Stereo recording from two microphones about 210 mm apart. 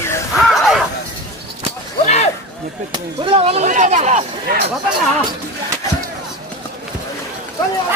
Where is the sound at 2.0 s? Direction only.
30° left (ahead or behind).